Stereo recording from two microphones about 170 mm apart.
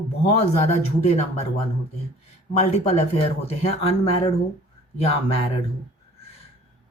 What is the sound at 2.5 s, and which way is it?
Speech, 40° left (ahead or behind).